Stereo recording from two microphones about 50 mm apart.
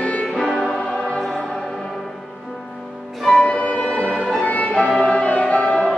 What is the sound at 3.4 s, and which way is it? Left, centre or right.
Music, left.